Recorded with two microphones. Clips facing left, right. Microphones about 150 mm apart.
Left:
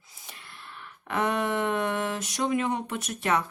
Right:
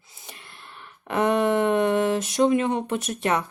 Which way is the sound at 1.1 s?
25° right (ahead or behind).